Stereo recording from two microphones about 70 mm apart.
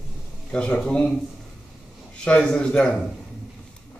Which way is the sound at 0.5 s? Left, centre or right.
Centre.